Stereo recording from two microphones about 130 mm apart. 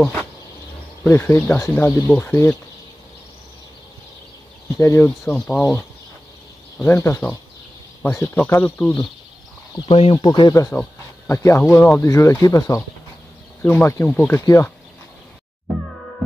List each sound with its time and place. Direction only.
0.0 s insect: 15° left (ahead or behind)
1.0 s speech: 15° left (ahead or behind)
4.7 s speech: 20° left (ahead or behind)
9.8 s speech: 45° left (ahead or behind)
10.2 s speech: 35° left (ahead or behind)
10.5 s speech: 25° left (ahead or behind)
14.4 s speech: 25° left (ahead or behind)